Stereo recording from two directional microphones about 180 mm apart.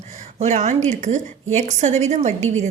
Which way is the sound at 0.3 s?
40° right (ahead or behind).